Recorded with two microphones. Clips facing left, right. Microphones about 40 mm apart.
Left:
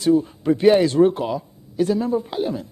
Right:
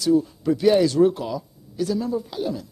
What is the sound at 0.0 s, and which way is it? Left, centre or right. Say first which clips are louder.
A man's voice: left 2 dB; left.